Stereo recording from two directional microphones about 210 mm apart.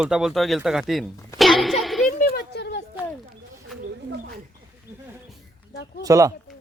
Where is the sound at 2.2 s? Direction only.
50° left (ahead or behind).